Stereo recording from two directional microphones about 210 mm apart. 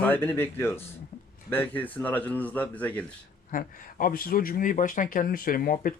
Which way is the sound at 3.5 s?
40° left (ahead or behind).